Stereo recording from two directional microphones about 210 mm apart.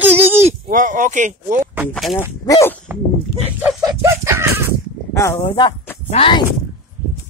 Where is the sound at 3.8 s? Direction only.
15° right (ahead or behind).